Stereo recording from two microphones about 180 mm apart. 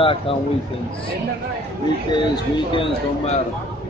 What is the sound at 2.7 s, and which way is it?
Speech, 30° left (ahead or behind).